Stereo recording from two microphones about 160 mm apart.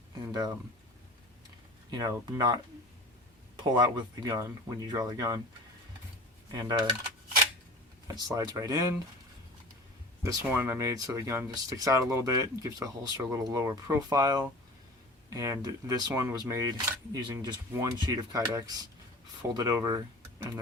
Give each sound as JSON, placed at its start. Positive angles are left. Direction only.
{"t": 0.3, "sound": "speech", "side_deg": -25}
{"t": 1.9, "sound": "speech", "side_deg": -25}
{"t": 3.6, "sound": "speech", "side_deg": -25}
{"t": 6.5, "sound": "speech", "side_deg": -25}
{"t": 8.0, "sound": "speech", "side_deg": -25}
{"t": 10.2, "sound": "speech", "side_deg": -15}